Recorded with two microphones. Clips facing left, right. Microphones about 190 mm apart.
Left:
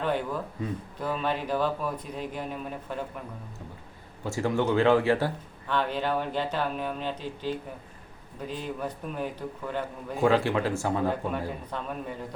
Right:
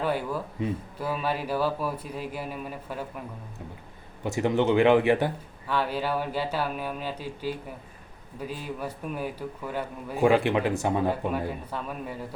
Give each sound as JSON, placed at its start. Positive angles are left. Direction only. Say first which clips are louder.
{"t": 0.0, "sound": "speech", "louder": "right 1 dB", "side_deg": -5}
{"t": 4.2, "sound": "speech", "louder": "right 2 dB", "side_deg": -20}
{"t": 5.6, "sound": "speech", "louder": "even", "side_deg": -5}
{"t": 11.3, "sound": "speech", "louder": "right 2 dB", "side_deg": -5}